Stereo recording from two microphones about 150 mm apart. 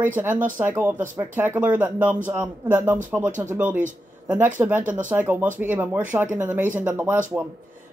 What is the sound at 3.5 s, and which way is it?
Speech, 10° right (ahead or behind).